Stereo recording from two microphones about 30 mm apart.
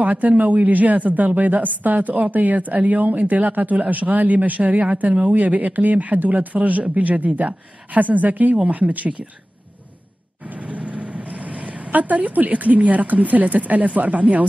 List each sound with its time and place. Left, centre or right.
0.0 s speech: right
10.4 s speech: right